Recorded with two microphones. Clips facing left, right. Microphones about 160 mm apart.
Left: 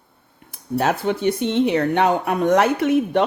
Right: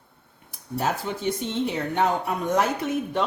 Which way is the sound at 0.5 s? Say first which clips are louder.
Left 6 dB; 70° left (ahead or behind).